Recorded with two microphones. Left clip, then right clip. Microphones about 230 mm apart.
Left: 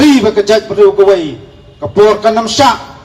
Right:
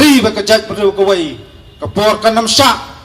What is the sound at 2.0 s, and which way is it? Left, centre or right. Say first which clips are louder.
Speech: left 3 dB; right.